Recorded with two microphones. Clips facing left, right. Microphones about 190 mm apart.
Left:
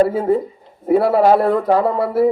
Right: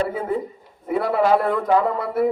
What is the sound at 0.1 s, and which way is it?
Speech, 40° left (ahead or behind).